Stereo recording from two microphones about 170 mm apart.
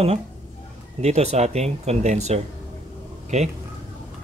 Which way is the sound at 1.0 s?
40° right (ahead or behind).